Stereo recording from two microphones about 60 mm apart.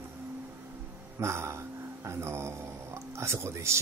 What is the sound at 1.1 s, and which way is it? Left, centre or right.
Speech, right.